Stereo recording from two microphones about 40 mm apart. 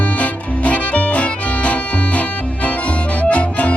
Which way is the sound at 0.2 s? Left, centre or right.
Left.